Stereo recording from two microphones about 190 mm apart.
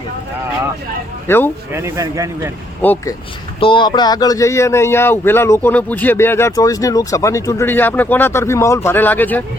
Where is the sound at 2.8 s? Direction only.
10° left (ahead or behind).